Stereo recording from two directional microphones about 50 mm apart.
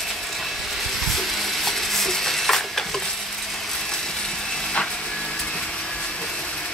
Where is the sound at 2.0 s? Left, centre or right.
Centre.